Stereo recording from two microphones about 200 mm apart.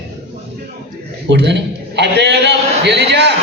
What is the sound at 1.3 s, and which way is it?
A man's voice, 60° right (ahead or behind).